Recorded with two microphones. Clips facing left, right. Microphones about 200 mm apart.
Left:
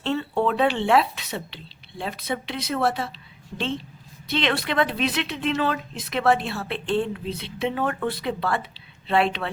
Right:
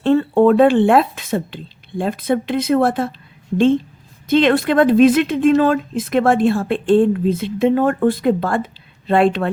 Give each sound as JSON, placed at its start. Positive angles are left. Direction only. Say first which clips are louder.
{"t": 0.0, "sound": "a woman's voice", "louder": "right 11 dB", "side_deg": -50}
{"t": 4.3, "sound": "a woman's voice", "louder": "right 11 dB", "side_deg": -50}